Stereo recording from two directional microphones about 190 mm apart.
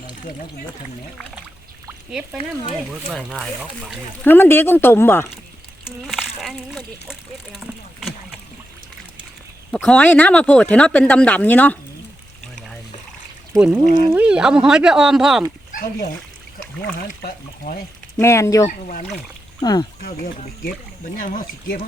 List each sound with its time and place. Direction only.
1.9 s speech: 5° right (ahead or behind)
4.3 s speech: 10° left (ahead or behind)
5.8 s speech: centre (ahead or behind)
9.7 s speech: 5° left (ahead or behind)
13.5 s speech: 5° right (ahead or behind)
13.8 s speech: 50° left (ahead or behind)
14.1 s speech: 5° right (ahead or behind)
18.2 s speech: 15° left (ahead or behind)
18.7 s speech: 45° left (ahead or behind)
19.6 s speech: 20° left (ahead or behind)
20.0 s speech: 50° left (ahead or behind)